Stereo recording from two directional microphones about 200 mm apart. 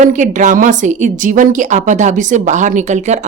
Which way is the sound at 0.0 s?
40° right (ahead or behind).